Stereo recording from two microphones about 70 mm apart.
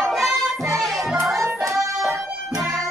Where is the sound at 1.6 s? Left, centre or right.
Right.